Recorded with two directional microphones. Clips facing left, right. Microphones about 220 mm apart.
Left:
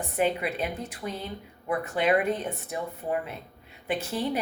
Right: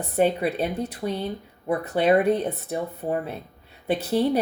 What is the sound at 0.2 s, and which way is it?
Speech, 35° right (ahead or behind).